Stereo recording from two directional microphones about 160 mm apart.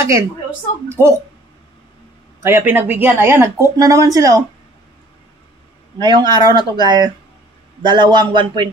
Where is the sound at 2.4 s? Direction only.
15° right (ahead or behind).